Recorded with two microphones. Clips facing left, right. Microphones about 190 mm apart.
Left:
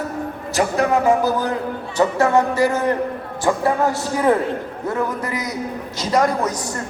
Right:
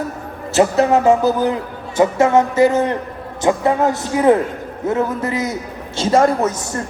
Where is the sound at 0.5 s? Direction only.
25° right (ahead or behind).